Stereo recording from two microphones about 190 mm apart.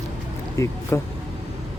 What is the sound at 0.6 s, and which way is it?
Speech, 15° left (ahead or behind).